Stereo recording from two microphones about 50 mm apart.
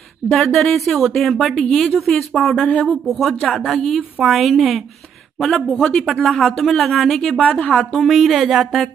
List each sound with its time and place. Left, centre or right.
0.3 s a woman's voice: centre
2.5 s a woman's voice: left
3.1 s a woman's voice: centre
6.0 s a woman's voice: centre
7.3 s a woman's voice: left
8.0 s a woman's voice: centre